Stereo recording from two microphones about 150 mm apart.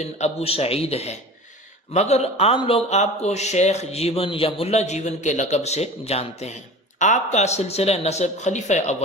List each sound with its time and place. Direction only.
0.0 s speech: 45° left (ahead or behind)